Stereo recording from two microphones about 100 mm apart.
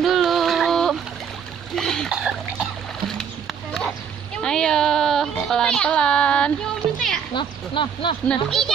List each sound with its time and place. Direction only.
0.0 s music: centre (ahead or behind)
1.8 s splash: 5° left (ahead or behind)
2.1 s splash: 5° right (ahead or behind)
4.4 s a sound: 5° left (ahead or behind)
5.5 s speech: 10° left (ahead or behind)
7.3 s speech: 55° left (ahead or behind)
8.3 s speech: 5° left (ahead or behind)